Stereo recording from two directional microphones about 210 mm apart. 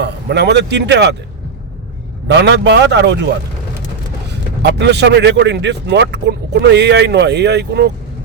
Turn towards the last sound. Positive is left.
turn(degrees=-55)  # may be behind; listen again after turning